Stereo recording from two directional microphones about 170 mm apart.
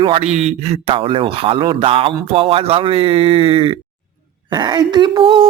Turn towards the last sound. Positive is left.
turn(degrees=-30)  # may be behind; listen again after turning